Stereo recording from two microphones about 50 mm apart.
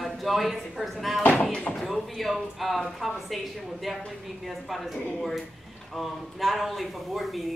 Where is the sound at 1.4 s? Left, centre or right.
Centre.